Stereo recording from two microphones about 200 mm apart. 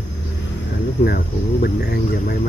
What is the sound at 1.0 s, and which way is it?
Speech, 50° left (ahead or behind).